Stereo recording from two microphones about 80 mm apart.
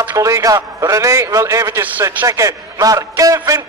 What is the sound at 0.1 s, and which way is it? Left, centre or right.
A man's voice, right.